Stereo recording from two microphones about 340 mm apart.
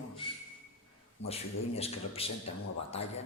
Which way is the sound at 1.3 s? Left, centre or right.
Centre.